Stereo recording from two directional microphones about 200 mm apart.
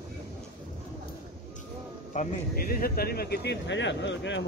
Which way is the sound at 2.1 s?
40° left (ahead or behind).